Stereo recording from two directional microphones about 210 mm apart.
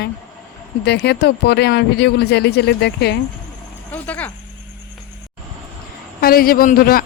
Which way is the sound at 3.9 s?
10° left (ahead or behind).